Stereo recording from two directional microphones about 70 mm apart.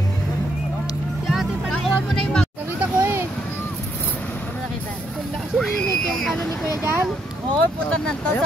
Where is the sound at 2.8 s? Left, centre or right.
Right.